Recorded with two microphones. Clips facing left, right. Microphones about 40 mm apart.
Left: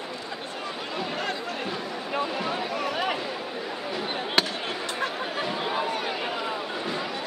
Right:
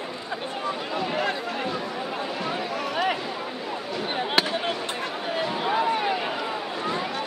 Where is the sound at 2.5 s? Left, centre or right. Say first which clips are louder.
Even; centre.